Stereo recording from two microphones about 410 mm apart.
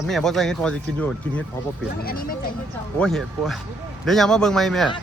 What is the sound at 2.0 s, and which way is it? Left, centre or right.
Speech, left.